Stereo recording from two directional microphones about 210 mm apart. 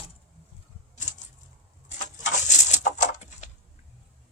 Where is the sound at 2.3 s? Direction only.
35° left (ahead or behind).